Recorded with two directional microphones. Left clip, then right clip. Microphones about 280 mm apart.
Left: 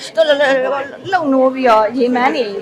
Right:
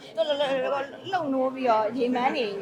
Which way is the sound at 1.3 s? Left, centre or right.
Left.